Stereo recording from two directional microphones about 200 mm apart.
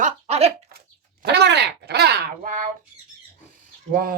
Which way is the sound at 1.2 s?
55° right (ahead or behind).